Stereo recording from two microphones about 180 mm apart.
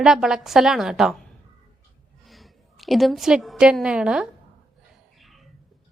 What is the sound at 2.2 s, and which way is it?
A woman's voice, centre (ahead or behind).